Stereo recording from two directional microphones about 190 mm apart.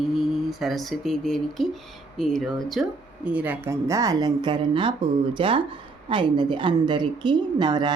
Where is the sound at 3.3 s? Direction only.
10° right (ahead or behind).